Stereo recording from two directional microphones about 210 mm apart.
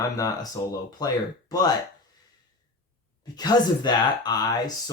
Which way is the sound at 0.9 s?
20° left (ahead or behind).